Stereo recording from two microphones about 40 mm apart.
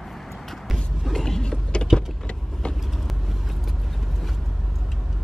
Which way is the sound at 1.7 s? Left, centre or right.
Left.